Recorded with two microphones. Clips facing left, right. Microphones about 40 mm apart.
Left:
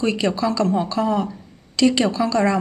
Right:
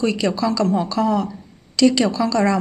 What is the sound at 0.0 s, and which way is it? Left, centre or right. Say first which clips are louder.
Speech: right 1 dB; left.